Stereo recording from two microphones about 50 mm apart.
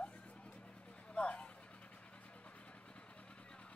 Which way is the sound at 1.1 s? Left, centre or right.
Left.